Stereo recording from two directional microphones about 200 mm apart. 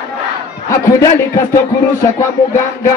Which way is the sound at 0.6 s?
15° left (ahead or behind).